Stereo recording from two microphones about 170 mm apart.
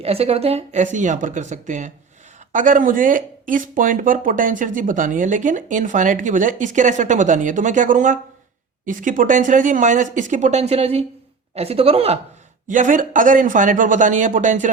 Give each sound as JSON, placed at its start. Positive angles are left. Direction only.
{"t": 0.0, "sound": "speech", "side_deg": -35}
{"t": 12.6, "sound": "speech", "side_deg": -50}